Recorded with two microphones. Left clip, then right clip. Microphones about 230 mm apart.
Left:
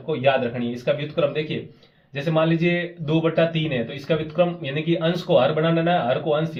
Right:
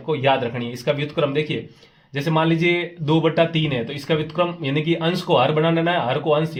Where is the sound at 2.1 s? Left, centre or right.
Right.